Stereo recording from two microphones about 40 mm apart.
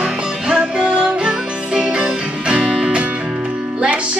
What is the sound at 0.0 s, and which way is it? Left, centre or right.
Music, centre.